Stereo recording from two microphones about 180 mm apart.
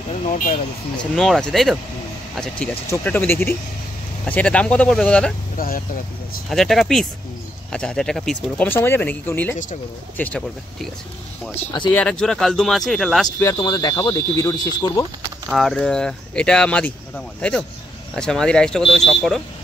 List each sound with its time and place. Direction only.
1.1 s speech: centre (ahead or behind)
5.6 s speech: 55° left (ahead or behind)
6.5 s speech: centre (ahead or behind)
11.9 s speech: 5° left (ahead or behind)
13.4 s speech: 20° left (ahead or behind)
15.5 s speech: 5° left (ahead or behind)